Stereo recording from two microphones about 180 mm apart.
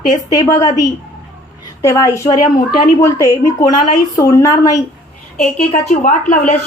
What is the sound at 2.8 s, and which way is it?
Speech, 15° left (ahead or behind).